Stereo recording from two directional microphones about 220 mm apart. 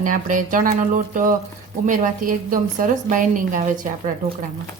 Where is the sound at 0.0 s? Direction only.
35° right (ahead or behind).